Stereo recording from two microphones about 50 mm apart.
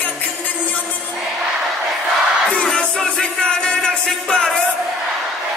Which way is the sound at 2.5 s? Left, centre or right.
Centre.